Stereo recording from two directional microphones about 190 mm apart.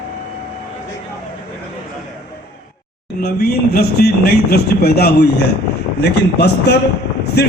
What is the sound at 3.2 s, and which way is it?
Speech, 55° left (ahead or behind).